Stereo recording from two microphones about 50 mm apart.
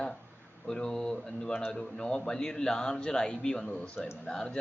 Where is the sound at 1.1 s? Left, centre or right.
Centre.